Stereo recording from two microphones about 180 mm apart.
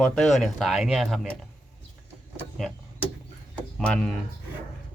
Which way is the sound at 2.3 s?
Centre (ahead or behind).